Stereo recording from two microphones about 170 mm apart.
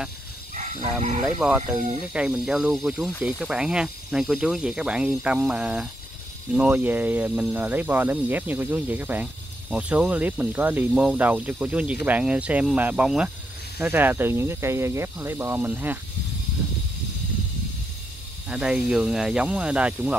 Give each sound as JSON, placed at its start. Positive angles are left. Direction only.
{"t": 0.6, "sound": "livestock", "side_deg": -45}
{"t": 1.4, "sound": "speech", "side_deg": -5}
{"t": 18.5, "sound": "speech", "side_deg": -5}